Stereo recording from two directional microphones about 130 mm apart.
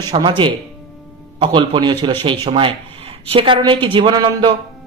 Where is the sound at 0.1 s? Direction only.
40° right (ahead or behind).